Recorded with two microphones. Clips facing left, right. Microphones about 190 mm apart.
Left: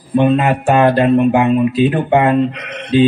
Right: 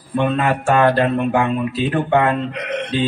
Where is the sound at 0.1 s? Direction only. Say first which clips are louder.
Left 5 dB; 20° left (ahead or behind).